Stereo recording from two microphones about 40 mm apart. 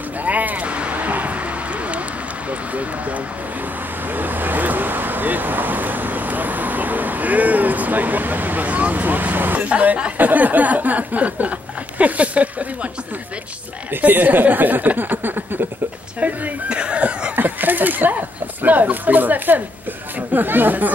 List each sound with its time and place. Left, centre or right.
0.2 s a sound: right
0.7 s vehicle: right
2.7 s speech: right
4.1 s speech: right
9.7 s speech: right
10.1 s speech: right
14.0 s speech: right
16.2 s speech: right
16.6 s speech: right
17.4 s speech: right